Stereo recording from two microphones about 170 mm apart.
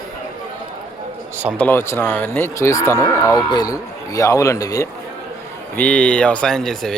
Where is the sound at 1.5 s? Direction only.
10° left (ahead or behind).